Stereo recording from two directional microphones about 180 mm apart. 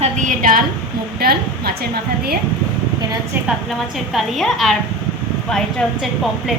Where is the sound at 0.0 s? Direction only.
45° right (ahead or behind).